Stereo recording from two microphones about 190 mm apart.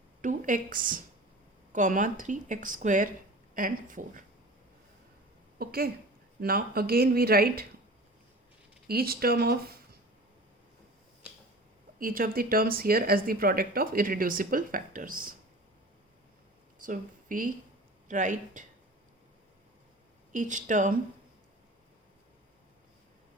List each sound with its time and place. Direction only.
0.2 s a woman's voice: 45° right (ahead or behind)
5.5 s a woman's voice: 55° right (ahead or behind)
8.9 s speech: 55° right (ahead or behind)
11.2 s finger snapping: 5° right (ahead or behind)
11.9 s speech: 50° right (ahead or behind)
16.8 s a woman's voice: 45° right (ahead or behind)
20.3 s speech: 40° right (ahead or behind)